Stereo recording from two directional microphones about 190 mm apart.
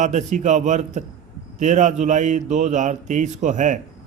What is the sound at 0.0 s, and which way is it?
A man's voice, 40° right (ahead or behind).